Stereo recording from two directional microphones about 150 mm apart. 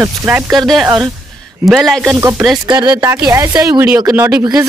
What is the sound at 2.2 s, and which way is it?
Speech, 15° right (ahead or behind).